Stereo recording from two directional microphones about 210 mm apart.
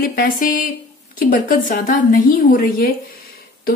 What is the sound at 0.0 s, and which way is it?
A woman's voice, 45° left (ahead or behind).